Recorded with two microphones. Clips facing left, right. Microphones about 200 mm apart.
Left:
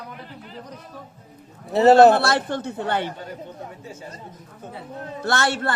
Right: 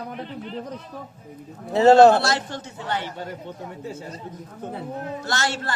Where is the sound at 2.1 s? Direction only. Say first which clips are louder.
Left 2 dB; 55° left (ahead or behind).